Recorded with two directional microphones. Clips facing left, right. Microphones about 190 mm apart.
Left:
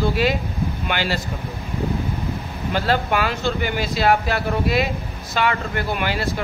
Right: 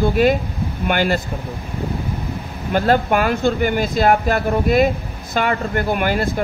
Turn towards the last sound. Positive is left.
turn(degrees=-50)  # may be behind; listen again after turning